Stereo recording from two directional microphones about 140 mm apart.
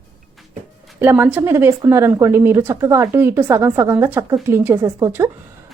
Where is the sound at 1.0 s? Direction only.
15° right (ahead or behind).